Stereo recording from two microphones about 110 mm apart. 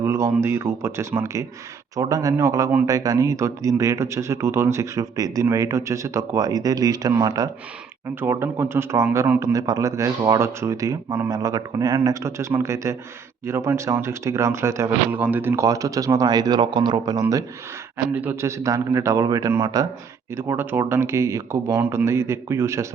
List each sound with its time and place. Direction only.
0.0 s speech: 25° right (ahead or behind)
8.2 s speech: 20° right (ahead or behind)
15.1 s speech: 15° right (ahead or behind); by 17.4 s 30° right (ahead or behind)
17.9 s speech: 15° right (ahead or behind); by 19.9 s 30° right (ahead or behind)
20.3 s speech: 20° right (ahead or behind)